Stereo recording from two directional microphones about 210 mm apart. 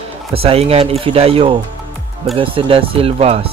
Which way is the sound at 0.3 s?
30° right (ahead or behind).